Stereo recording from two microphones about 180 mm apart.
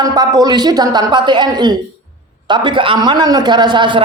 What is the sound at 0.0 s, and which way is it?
A man's voice, 20° right (ahead or behind).